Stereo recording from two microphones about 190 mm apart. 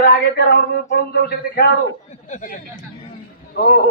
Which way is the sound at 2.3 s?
45° left (ahead or behind).